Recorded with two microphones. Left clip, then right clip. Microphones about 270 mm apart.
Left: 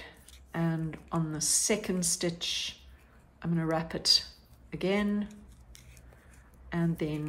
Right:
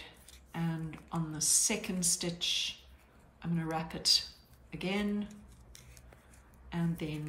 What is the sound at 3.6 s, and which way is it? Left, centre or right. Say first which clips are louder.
A woman's voice: left 4 dB; centre.